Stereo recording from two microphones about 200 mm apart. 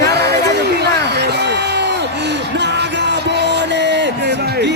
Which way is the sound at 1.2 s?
55° right (ahead or behind).